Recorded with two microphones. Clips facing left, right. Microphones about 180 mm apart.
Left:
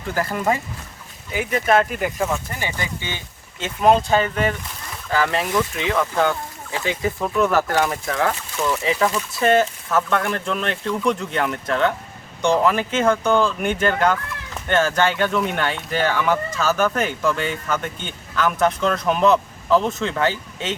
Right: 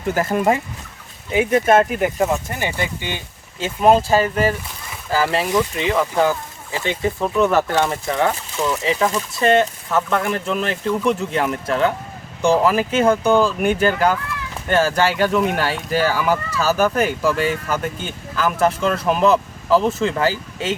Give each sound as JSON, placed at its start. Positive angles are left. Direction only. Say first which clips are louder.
{"t": 0.1, "sound": "speech", "louder": "right 4 dB", "side_deg": -20}
{"t": 1.5, "sound": "speech", "louder": "right 3 dB", "side_deg": -45}
{"t": 1.8, "sound": "speech", "louder": "right 4 dB", "side_deg": -30}
{"t": 2.3, "sound": "speech", "louder": "right 3 dB", "side_deg": -20}
{"t": 3.8, "sound": "speech", "louder": "right 2 dB", "side_deg": -5}
{"t": 8.0, "sound": "speech", "louder": "right 2 dB", "side_deg": -10}